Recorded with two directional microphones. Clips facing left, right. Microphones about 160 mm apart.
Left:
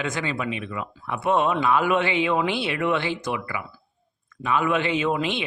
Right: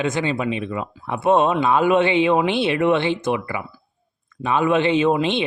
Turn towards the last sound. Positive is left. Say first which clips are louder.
# right 6 dB
turn(degrees=-25)  # may be behind; listen again after turning